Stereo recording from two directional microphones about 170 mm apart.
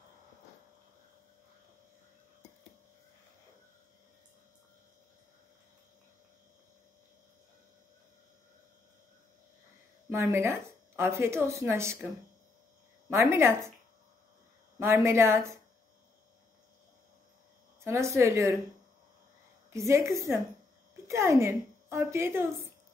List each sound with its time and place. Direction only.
10.0 s speech: 15° right (ahead or behind)
13.1 s speech: 15° right (ahead or behind)
14.8 s speech: 15° right (ahead or behind)
17.8 s speech: 15° right (ahead or behind)
19.7 s a woman's voice: 15° right (ahead or behind)